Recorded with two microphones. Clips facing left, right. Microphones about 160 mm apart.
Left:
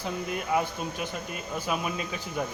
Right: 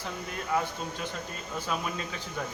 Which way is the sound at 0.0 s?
15° left (ahead or behind).